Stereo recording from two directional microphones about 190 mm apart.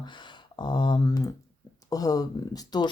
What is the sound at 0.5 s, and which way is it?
Speech, 25° left (ahead or behind).